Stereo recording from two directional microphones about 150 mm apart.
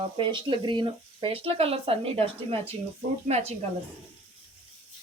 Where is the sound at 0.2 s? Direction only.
35° right (ahead or behind).